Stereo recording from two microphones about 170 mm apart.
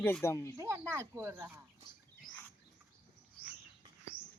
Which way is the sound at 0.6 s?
15° right (ahead or behind).